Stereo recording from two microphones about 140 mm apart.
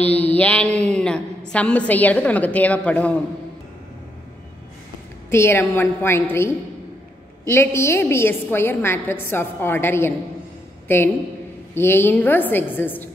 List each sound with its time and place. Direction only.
0.2 s a woman's voice: 10° left (ahead or behind)
5.3 s a woman's voice: 15° left (ahead or behind)